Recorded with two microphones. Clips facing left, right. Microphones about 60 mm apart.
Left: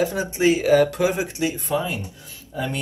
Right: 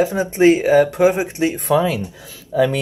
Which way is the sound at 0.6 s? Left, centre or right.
Centre.